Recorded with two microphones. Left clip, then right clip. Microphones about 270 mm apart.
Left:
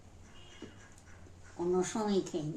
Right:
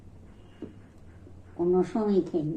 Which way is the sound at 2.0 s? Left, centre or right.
Centre.